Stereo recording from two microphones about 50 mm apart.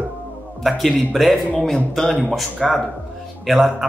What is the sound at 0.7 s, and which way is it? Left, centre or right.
Speech, centre.